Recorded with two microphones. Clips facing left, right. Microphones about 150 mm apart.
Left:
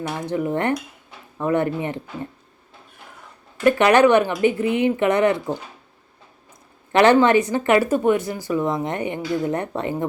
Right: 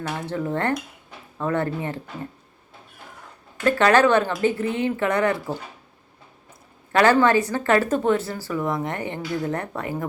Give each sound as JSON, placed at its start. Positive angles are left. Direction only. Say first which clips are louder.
{"t": 0.1, "sound": "speech", "louder": "left 3 dB", "side_deg": 15}
{"t": 3.6, "sound": "speech", "louder": "left 3 dB", "side_deg": 20}
{"t": 6.9, "sound": "speech", "louder": "left 3 dB", "side_deg": 20}